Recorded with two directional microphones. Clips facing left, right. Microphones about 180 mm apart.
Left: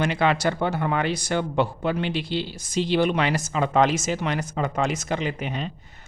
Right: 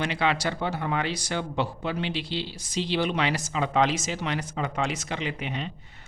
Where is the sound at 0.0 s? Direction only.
45° left (ahead or behind).